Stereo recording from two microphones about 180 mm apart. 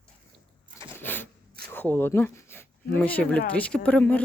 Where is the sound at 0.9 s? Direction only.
10° left (ahead or behind).